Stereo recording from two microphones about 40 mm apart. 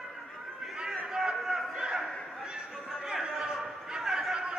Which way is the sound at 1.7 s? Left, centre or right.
Centre.